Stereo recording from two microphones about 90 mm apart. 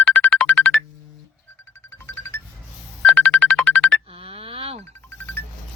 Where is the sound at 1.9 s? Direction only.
30° left (ahead or behind).